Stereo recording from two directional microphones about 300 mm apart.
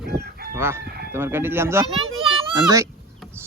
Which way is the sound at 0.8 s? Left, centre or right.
Right.